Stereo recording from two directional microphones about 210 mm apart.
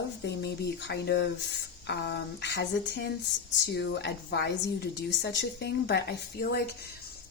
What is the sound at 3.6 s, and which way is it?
A woman's voice, 55° left (ahead or behind).